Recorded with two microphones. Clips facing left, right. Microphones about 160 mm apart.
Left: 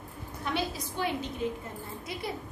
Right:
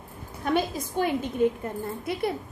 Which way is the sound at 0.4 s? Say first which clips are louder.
Right 7 dB; 50° right (ahead or behind).